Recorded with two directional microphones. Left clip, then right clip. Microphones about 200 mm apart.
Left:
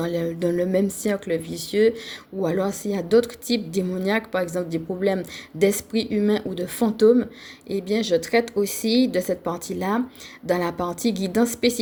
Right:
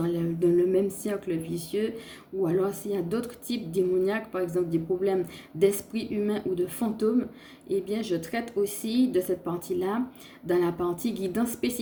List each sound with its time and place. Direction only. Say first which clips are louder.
0.0 s a woman's voice: left 2 dB; 40° left (ahead or behind)